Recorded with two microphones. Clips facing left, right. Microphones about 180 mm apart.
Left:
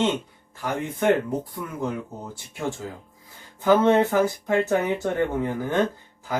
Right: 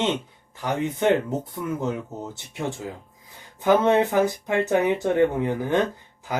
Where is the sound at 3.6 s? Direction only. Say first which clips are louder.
Left 1 dB; 15° right (ahead or behind).